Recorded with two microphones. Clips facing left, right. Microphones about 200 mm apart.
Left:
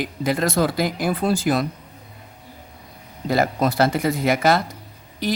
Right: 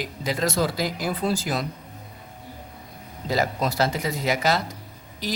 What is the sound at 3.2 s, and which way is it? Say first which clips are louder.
Speech: left 4 dB; 55° left (ahead or behind).